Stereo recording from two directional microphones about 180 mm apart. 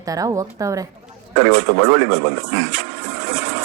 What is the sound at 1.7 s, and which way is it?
Speech, 75° right (ahead or behind).